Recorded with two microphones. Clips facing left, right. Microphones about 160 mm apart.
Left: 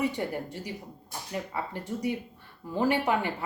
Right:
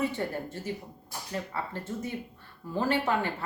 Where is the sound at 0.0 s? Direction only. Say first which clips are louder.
Left 1 dB; 15° left (ahead or behind).